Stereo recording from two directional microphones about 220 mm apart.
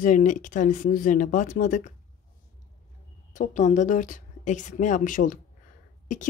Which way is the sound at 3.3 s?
35° left (ahead or behind).